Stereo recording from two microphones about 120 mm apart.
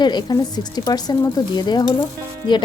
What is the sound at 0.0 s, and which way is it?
A woman's voice, 35° left (ahead or behind).